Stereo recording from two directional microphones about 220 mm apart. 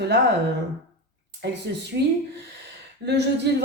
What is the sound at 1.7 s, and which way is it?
Speech, 50° right (ahead or behind).